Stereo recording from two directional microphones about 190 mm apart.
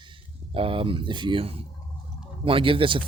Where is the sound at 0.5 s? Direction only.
30° right (ahead or behind).